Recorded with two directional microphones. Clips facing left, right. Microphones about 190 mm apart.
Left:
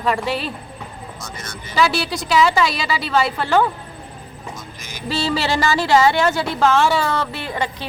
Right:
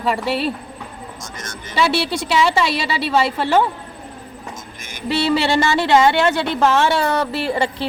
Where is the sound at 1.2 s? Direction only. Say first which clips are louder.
Even; 45° right (ahead or behind).